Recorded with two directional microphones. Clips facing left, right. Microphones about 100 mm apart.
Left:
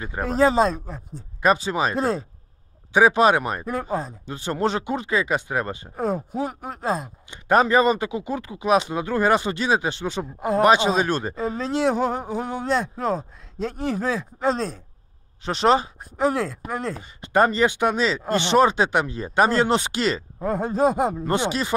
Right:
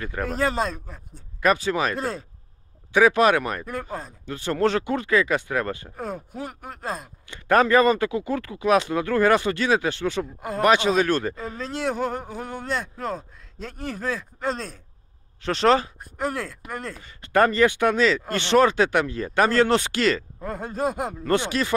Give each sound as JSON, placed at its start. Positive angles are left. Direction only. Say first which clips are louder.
{"t": 0.0, "sound": "speech", "louder": "left 5 dB", "side_deg": 20}
{"t": 5.9, "sound": "speech", "louder": "left 7 dB", "side_deg": 45}
{"t": 7.2, "sound": "speech", "louder": "even", "side_deg": 20}
{"t": 13.0, "sound": "speech", "louder": "left 5 dB", "side_deg": 45}
{"t": 15.4, "sound": "speech", "louder": "even", "side_deg": 20}
{"t": 16.3, "sound": "speech", "louder": "left 6 dB", "side_deg": 45}
{"t": 17.0, "sound": "speech", "louder": "even", "side_deg": 20}
{"t": 20.4, "sound": "speech", "louder": "left 6 dB", "side_deg": 45}
{"t": 21.2, "sound": "speech", "louder": "even", "side_deg": 20}